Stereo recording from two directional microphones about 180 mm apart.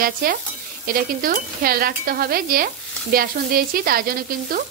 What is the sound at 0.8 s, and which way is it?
Stir, 55° right (ahead or behind).